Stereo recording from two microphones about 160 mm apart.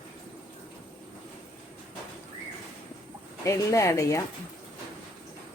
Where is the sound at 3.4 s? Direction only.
20° left (ahead or behind).